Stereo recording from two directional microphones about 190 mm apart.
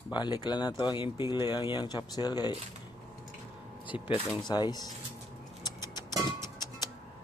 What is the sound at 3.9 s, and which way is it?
Speech, 30° left (ahead or behind).